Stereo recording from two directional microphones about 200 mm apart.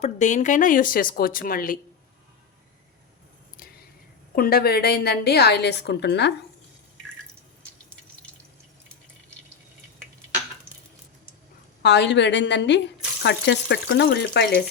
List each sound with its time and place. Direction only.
0.0 s speech: 35° left (ahead or behind)
3.6 s whispering: 45° left (ahead or behind)
4.4 s a woman's voice: 50° left (ahead or behind)
11.8 s a woman's voice: 60° left (ahead or behind)